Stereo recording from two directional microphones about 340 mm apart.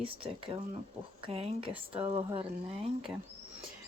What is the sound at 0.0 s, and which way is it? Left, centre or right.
Speech, centre.